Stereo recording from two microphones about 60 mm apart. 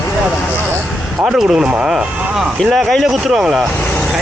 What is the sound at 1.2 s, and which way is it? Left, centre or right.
Speech, centre.